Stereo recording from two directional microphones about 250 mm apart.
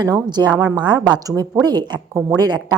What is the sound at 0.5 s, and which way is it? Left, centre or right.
Speech, centre.